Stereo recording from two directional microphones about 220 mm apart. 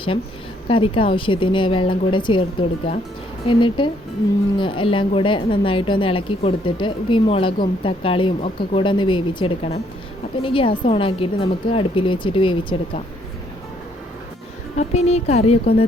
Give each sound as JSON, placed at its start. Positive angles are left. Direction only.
{"t": 0.7, "sound": "a woman's voice", "side_deg": 25}
{"t": 14.8, "sound": "a woman's voice", "side_deg": 30}